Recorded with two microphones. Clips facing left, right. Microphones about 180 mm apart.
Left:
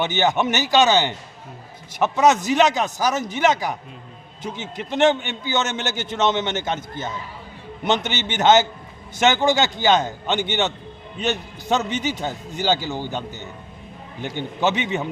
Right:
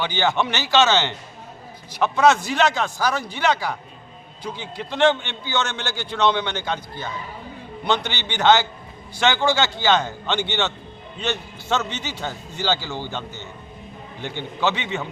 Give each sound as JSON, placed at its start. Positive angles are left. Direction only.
{"t": 0.0, "sound": "a man's voice", "side_deg": 20}
{"t": 4.8, "sound": "a man's voice", "side_deg": 20}
{"t": 8.0, "sound": "a man's voice", "side_deg": 20}